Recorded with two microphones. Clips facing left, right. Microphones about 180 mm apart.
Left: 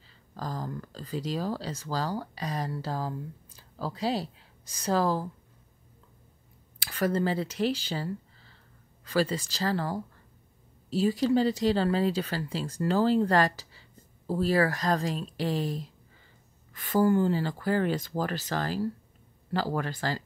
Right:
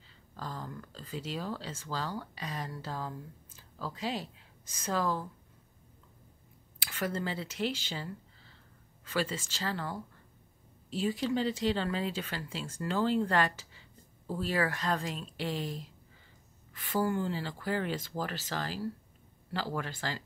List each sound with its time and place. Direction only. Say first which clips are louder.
0.4 s speech: left 6 dB; 40° left (ahead or behind)
6.8 s speech: left 7 dB; 40° left (ahead or behind)